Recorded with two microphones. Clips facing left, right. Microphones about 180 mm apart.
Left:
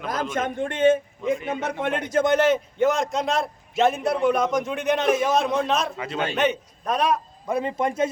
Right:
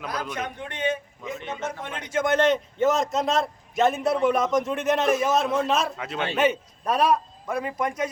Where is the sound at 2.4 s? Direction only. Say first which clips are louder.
Left 1 dB; 5° left (ahead or behind).